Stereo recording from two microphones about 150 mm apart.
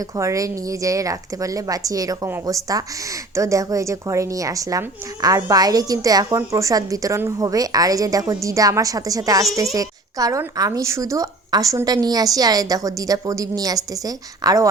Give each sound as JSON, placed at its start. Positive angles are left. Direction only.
{"t": 0.2, "sound": "a woman's voice", "side_deg": -20}